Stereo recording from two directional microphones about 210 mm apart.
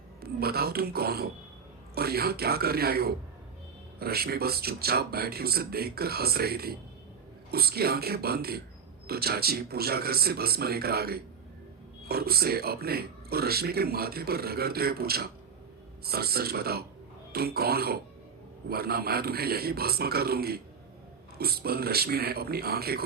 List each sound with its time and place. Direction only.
0.2 s speech: 50° right (ahead or behind)